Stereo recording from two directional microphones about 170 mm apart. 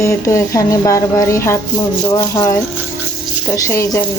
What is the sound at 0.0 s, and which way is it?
Speech, 15° left (ahead or behind).